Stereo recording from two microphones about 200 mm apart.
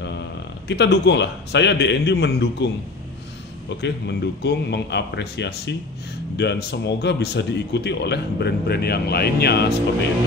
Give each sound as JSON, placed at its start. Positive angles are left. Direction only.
{"t": 0.7, "sound": "speech", "side_deg": 60}